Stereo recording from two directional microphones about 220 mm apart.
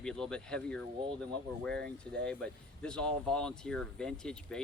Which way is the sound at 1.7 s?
45° right (ahead or behind).